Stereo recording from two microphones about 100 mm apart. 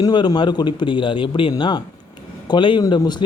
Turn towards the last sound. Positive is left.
turn(degrees=45)  # may be behind; listen again after turning